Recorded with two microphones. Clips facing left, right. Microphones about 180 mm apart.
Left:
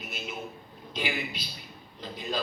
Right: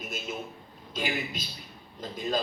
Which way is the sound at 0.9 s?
45° right (ahead or behind).